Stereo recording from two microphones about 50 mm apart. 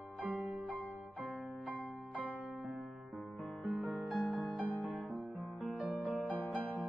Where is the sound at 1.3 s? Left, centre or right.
Right.